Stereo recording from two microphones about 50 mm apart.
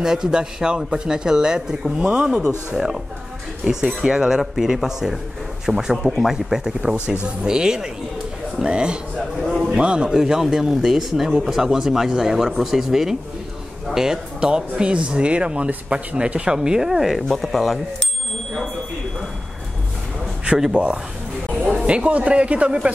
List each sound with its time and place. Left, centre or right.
0.0 s speech: centre
10.1 s speech: centre
20.4 s speech: centre
20.7 s a man's voice: right